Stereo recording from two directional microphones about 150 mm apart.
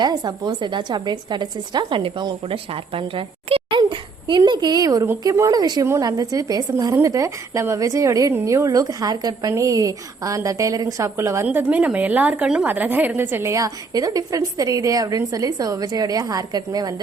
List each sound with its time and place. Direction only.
0.0 s a woman's voice: 30° right (ahead or behind)